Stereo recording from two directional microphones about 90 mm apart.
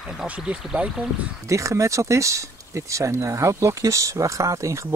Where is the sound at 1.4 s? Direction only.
35° right (ahead or behind).